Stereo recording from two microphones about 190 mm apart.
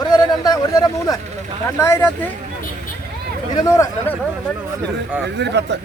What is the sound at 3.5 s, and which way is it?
Speech, 15° left (ahead or behind).